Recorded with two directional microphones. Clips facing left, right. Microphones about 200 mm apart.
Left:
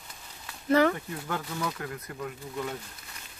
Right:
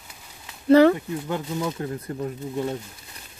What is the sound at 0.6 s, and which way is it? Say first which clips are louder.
Speech: right 8 dB; 30° right (ahead or behind).